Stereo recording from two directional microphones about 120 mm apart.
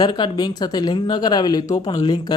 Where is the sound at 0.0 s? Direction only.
35° left (ahead or behind).